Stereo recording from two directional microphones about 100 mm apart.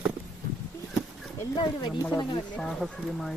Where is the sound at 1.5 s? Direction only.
50° left (ahead or behind).